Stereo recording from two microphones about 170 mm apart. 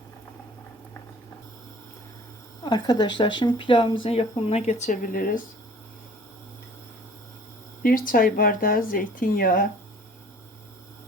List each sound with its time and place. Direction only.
2.6 s speech: 25° left (ahead or behind); by 5.4 s 55° left (ahead or behind)
7.8 s speech: 60° left (ahead or behind)